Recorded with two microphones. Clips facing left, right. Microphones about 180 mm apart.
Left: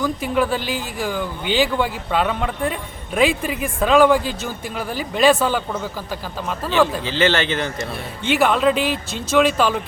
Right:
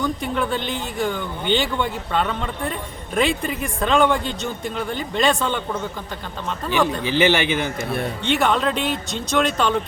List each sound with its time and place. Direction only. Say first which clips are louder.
0.0 s a man's voice: left 3 dB; 5° left (ahead or behind)
6.7 s a man's voice: left 2 dB; 15° right (ahead or behind)
8.3 s a man's voice: left 4 dB; 5° left (ahead or behind)